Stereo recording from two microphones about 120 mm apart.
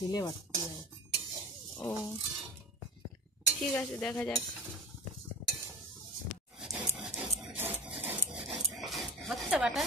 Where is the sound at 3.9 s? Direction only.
10° left (ahead or behind).